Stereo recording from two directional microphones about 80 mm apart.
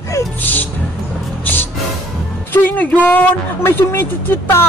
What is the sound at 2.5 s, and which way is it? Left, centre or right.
Speech, left.